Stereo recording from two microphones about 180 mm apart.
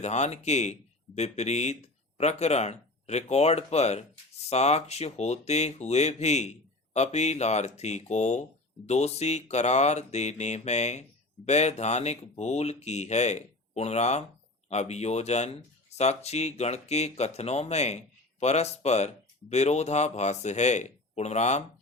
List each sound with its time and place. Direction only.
0.0 s speech: 40° left (ahead or behind)